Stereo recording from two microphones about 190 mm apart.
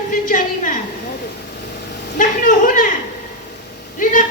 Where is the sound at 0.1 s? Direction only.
45° left (ahead or behind).